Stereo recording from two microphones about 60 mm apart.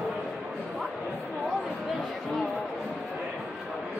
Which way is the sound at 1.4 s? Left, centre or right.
Centre.